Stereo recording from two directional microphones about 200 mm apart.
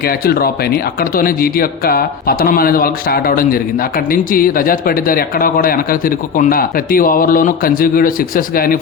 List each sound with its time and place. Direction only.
0.3 s speech: 50° left (ahead or behind)